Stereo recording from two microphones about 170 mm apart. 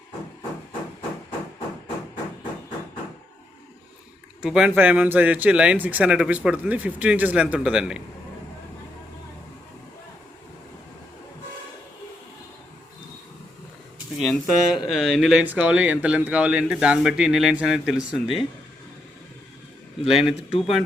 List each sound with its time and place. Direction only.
4.4 s speech: 5° right (ahead or behind)
14.2 s speech: centre (ahead or behind)
20.1 s speech: 5° right (ahead or behind)